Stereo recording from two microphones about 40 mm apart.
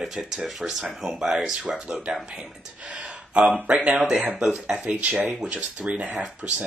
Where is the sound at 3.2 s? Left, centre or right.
Right.